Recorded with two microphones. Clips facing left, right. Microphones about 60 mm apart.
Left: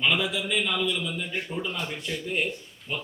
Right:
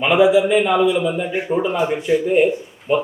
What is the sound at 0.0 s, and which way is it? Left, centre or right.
Speech, right.